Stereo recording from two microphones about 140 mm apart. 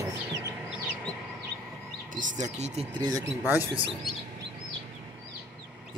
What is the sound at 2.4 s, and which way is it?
Speech, 55° right (ahead or behind).